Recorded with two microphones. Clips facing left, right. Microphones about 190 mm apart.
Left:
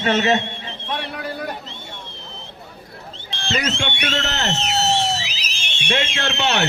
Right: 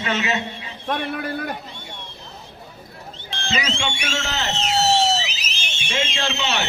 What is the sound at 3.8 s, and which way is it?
Speech, 60° left (ahead or behind).